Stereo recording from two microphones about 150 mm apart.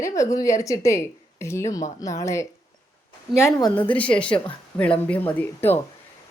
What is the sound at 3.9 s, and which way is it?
Speech, 10° left (ahead or behind).